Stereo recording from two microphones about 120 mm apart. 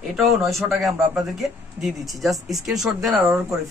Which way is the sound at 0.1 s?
Centre (ahead or behind).